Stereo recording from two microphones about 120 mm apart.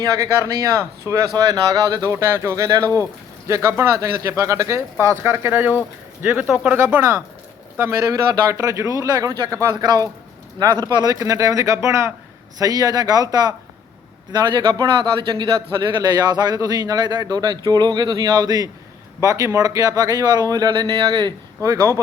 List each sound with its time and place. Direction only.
0.0 s speech: 25° right (ahead or behind); by 6.7 s 10° right (ahead or behind)
6.7 s a man's voice: 20° right (ahead or behind)